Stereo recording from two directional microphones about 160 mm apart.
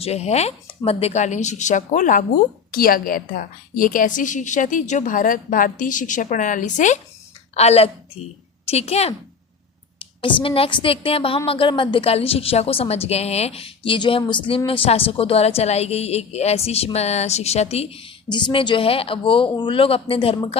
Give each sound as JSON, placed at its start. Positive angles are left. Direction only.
{"t": 0.0, "sound": "speech", "side_deg": 40}
{"t": 2.7, "sound": "a woman's voice", "side_deg": 65}